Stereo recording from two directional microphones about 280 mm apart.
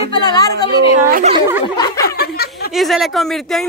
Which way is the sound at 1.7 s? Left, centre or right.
Centre.